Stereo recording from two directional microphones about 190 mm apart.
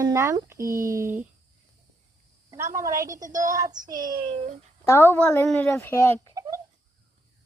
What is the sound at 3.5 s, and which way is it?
Speech, 20° right (ahead or behind).